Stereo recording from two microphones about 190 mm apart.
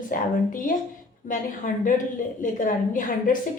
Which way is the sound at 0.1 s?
50° left (ahead or behind).